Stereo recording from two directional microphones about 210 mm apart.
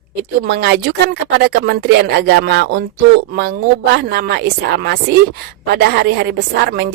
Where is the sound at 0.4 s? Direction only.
50° right (ahead or behind).